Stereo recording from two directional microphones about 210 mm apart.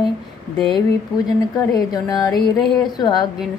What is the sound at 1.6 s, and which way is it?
A woman's voice, 15° left (ahead or behind).